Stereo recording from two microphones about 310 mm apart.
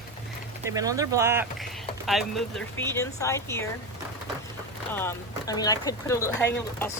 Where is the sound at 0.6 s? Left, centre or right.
Centre.